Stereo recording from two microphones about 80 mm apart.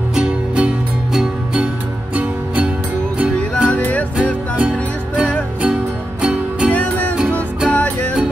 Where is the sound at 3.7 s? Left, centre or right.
Centre.